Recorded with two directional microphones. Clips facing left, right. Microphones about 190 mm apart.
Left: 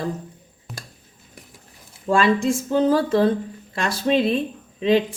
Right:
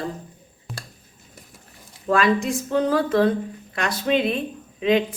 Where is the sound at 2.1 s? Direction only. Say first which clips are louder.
Left 1 dB; 30° left (ahead or behind).